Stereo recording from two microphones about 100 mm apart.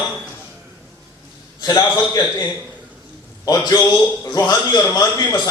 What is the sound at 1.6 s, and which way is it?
Speech, 40° left (ahead or behind).